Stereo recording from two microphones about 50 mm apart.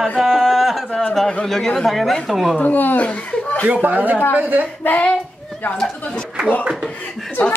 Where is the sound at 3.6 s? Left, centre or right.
Right.